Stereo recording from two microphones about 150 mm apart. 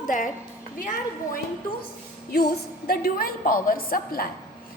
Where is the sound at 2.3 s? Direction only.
85° left.